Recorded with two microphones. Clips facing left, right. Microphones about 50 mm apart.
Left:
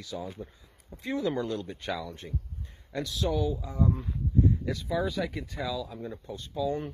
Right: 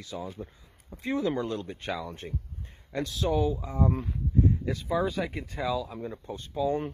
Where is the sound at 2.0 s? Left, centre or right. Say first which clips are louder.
Right 1 dB; right.